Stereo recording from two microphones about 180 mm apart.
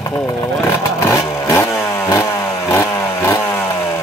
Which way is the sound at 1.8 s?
15° left (ahead or behind).